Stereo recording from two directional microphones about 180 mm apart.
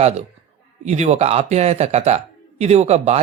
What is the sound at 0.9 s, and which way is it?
Speech, 40° right (ahead or behind).